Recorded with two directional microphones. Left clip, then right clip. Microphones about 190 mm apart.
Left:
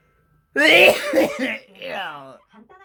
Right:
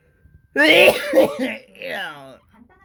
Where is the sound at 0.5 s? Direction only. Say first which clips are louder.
Even; 25° right (ahead or behind).